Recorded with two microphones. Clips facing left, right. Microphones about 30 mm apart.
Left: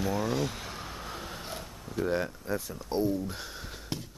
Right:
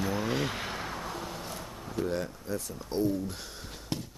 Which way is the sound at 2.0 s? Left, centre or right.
Centre.